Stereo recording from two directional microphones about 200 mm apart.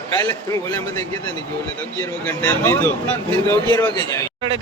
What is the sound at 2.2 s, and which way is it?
Speech, 10° left (ahead or behind).